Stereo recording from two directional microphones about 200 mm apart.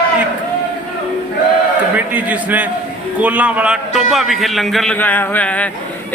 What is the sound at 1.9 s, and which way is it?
A man's voice, 10° right (ahead or behind).